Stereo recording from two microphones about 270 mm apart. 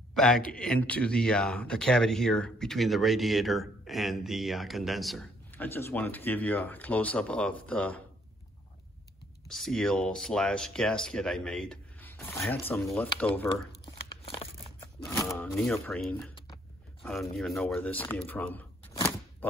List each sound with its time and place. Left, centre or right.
0.1 s speech: centre
9.5 s speech: centre
14.2 s a sound: left
15.0 s speech: centre